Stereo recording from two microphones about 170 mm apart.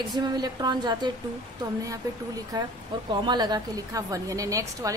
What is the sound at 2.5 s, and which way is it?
A woman's voice, 25° right (ahead or behind).